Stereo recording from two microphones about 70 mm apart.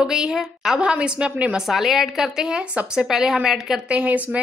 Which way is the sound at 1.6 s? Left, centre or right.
Centre.